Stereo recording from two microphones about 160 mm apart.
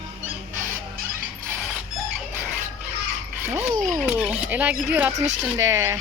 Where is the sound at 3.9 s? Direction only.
Centre (ahead or behind).